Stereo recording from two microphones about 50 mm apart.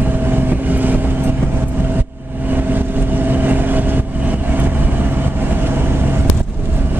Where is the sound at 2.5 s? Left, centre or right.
Right.